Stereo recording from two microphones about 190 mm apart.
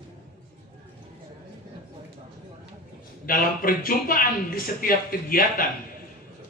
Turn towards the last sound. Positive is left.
turn(degrees=50)  # may be behind; listen again after turning